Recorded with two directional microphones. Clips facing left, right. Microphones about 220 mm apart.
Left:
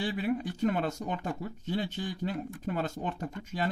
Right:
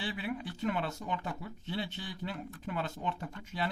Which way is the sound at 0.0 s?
40° left (ahead or behind).